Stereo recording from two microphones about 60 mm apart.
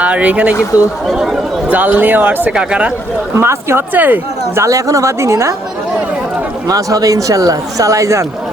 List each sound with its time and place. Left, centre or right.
0.0 s speech: right
1.0 s speech: centre
1.7 s speech: right
2.6 s speech: centre
3.3 s speech: right
3.9 s speech: right
4.5 s a woman's voice: right
6.7 s speech: right